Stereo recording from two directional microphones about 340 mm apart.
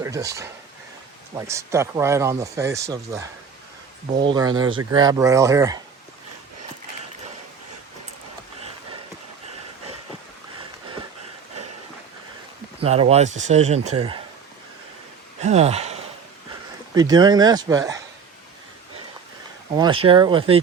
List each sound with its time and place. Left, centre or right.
0.0 s speech: centre
12.8 s speech: centre
15.4 s speech: centre
19.7 s speech: centre